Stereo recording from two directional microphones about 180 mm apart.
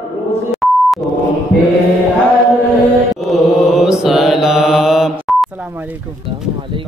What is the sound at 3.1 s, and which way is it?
Mantra, centre (ahead or behind).